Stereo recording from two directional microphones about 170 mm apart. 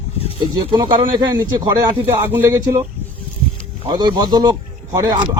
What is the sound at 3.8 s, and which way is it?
Speech, 25° right (ahead or behind).